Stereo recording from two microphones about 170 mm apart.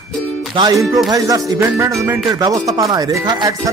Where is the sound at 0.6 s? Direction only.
25° right (ahead or behind).